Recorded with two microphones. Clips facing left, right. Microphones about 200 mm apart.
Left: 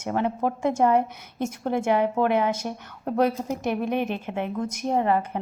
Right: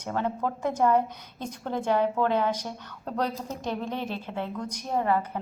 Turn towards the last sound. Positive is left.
turn(degrees=20)  # may be behind; listen again after turning